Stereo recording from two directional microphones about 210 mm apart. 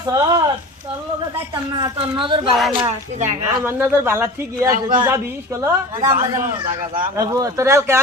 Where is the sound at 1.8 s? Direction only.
20° right (ahead or behind).